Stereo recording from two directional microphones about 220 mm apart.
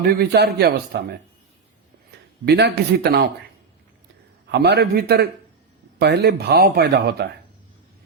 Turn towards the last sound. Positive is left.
turn(degrees=-50)  # may be behind; listen again after turning